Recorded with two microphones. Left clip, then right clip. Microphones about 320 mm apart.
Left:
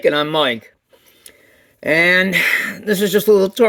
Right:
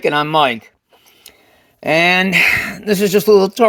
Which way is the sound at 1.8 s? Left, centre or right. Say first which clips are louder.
Right 1 dB; centre.